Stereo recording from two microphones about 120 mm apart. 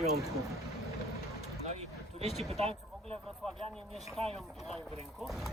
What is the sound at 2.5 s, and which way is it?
Speech, 60° right (ahead or behind).